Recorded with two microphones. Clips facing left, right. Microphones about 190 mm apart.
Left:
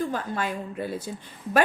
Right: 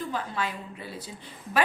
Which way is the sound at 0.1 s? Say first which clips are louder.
Left 3 dB; 50° left (ahead or behind).